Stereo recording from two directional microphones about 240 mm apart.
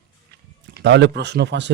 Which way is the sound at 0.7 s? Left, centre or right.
Right.